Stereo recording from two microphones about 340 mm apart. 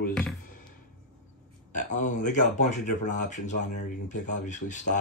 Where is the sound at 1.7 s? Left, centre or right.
Left.